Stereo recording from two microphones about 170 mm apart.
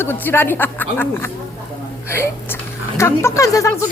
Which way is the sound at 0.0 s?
10° left (ahead or behind).